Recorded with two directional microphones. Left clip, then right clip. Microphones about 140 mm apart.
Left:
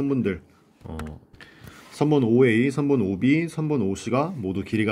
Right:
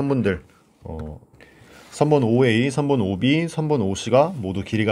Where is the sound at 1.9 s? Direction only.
40° right (ahead or behind).